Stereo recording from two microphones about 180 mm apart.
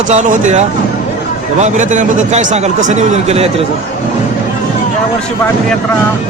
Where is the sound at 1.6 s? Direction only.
45° right (ahead or behind).